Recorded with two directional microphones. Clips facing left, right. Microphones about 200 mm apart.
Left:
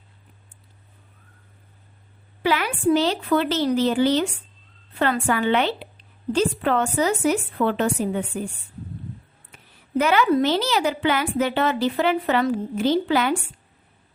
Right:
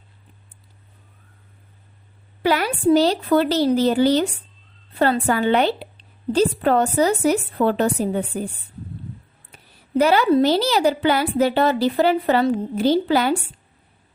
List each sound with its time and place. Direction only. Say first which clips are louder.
2.4 s a woman's voice: right 3 dB; 40° right (ahead or behind)
9.5 s a sound: right 2 dB; 35° right (ahead or behind)
10.0 s a woman's voice: right 3 dB; 35° right (ahead or behind)